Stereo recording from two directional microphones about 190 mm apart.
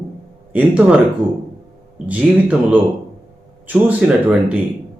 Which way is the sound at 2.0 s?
5° right (ahead or behind).